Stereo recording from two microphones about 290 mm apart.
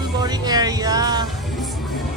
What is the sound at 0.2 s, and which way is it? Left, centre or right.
Speech, centre.